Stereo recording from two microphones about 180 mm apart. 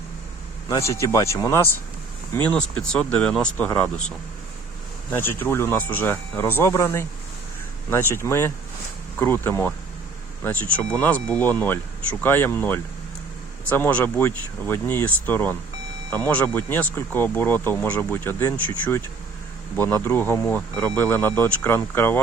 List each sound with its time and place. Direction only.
0.9 s speech: 15° left (ahead or behind)
5.1 s speech: 10° left (ahead or behind)